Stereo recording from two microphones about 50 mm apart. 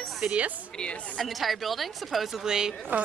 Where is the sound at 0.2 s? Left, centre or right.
Right.